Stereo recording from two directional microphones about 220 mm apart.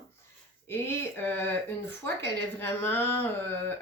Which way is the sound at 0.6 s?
10° left (ahead or behind).